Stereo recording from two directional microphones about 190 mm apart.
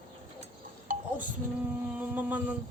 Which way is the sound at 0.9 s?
40° right (ahead or behind).